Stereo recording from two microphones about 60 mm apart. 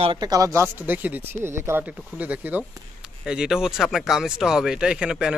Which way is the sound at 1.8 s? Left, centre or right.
Right.